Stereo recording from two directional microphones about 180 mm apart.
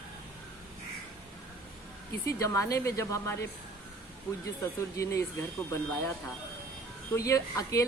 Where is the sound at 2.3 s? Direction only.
20° left (ahead or behind).